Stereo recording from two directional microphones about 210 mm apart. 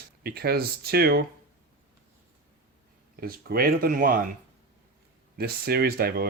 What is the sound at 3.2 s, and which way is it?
Speech, 45° right (ahead or behind).